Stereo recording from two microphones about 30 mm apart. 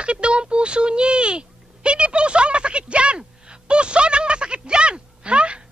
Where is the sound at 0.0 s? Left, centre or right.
Right.